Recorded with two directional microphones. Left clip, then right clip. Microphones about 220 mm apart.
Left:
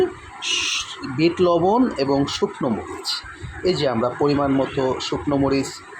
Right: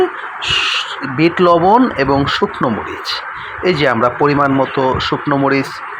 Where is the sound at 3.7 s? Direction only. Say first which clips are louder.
Right 7 dB; 5° right (ahead or behind).